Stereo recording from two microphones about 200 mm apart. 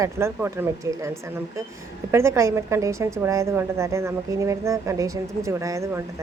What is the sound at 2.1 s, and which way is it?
A woman's voice, 15° right (ahead or behind).